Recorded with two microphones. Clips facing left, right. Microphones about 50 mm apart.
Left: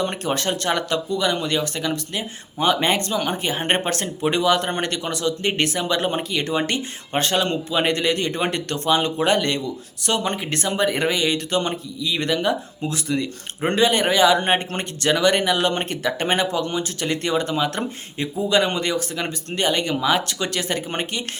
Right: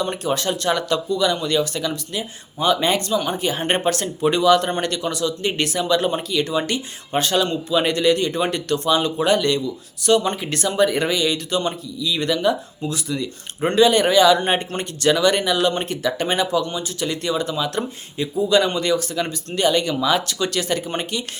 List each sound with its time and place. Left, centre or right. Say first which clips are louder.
0.0 s speech: right 1 dB; left